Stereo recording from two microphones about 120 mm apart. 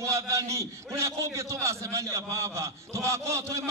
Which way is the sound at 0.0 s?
25° right (ahead or behind).